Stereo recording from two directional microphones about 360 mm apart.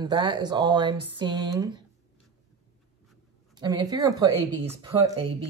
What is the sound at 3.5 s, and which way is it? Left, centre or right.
Speech, centre.